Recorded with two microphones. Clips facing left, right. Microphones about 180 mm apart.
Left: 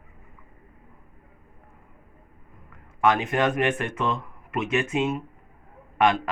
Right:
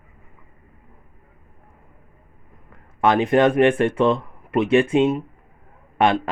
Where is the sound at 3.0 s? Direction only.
35° right (ahead or behind).